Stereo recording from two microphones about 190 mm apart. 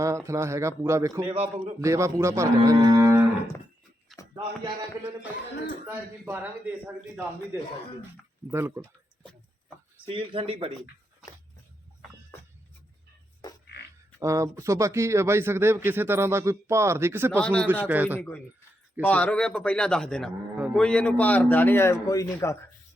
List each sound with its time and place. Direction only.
0.3 s a man's voice: 15° right (ahead or behind)
1.3 s speech: 30° right (ahead or behind)
1.8 s a man's voice: 15° right (ahead or behind)
4.4 s speech: 25° right (ahead or behind)
5.8 s a man's voice: 10° right (ahead or behind)
10.1 s speech: 30° right (ahead or behind)
14.2 s a man's voice: 15° right (ahead or behind)
17.3 s a man's voice: 5° left (ahead or behind)
17.7 s a man's voice: 10° right (ahead or behind)
18.2 s a man's voice: 10° left (ahead or behind)